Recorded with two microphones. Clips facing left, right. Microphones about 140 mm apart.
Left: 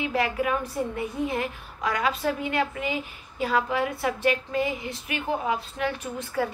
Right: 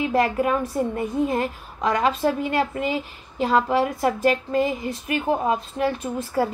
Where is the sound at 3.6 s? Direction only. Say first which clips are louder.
Right 5 dB; 40° right (ahead or behind).